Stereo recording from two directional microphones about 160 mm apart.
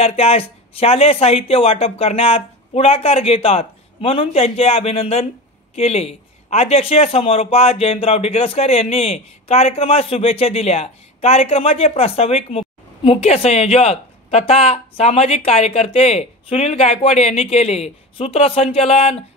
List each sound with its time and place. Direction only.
0.0 s a man's voice: 40° left (ahead or behind)